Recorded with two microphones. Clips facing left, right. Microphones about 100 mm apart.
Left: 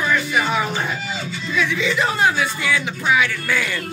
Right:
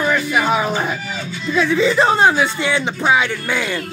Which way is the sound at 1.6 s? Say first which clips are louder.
Right 6 dB; 35° right (ahead or behind).